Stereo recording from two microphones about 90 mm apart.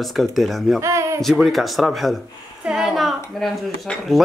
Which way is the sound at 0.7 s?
35° right (ahead or behind).